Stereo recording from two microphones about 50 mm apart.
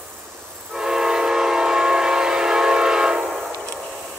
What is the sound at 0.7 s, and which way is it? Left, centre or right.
Train, centre.